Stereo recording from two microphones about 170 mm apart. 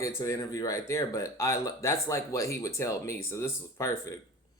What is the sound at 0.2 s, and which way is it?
Speech, 20° left (ahead or behind).